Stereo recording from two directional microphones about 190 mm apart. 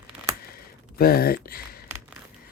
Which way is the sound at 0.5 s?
55° left (ahead or behind).